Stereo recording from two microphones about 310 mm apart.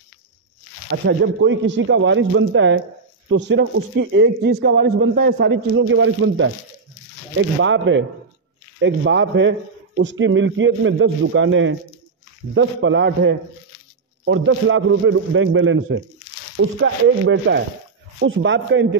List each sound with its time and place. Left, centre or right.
0.8 s a man's voice: right
16.8 s a man's voice: right